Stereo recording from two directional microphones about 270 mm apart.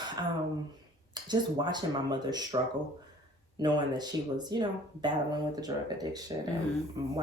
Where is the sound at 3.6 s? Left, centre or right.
Centre.